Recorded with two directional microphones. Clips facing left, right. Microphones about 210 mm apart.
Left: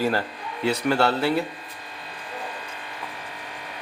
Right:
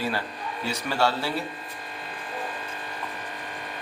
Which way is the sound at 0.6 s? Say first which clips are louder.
Left 5 dB; 55° left (ahead or behind).